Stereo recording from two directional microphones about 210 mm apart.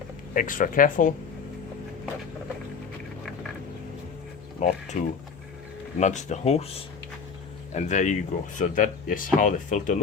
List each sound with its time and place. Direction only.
0.3 s speech: 40° left (ahead or behind)
4.6 s speech: 35° left (ahead or behind)
7.8 s speech: 35° left (ahead or behind)